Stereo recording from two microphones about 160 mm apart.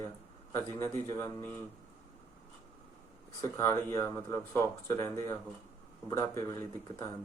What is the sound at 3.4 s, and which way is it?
Speech, 20° left (ahead or behind).